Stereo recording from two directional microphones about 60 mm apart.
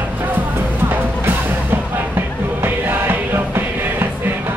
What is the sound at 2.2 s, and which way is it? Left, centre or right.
Music, right.